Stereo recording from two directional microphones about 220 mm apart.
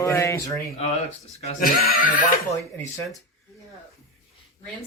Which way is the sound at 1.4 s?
40° left (ahead or behind).